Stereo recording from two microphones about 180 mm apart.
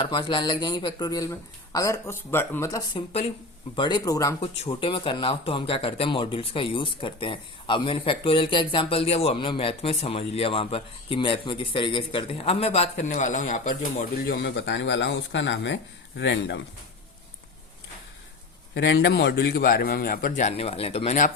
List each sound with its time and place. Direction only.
0.0 s speech: 25° left (ahead or behind)
3.1 s speech: 35° left (ahead or behind)
3.8 s speech: 25° left (ahead or behind); by 13.7 s 45° left (ahead or behind)
14.3 s speech: 65° left (ahead or behind)
18.7 s a man's voice: 70° left (ahead or behind); by 20.5 s 50° left (ahead or behind)
20.5 s speech: 35° left (ahead or behind)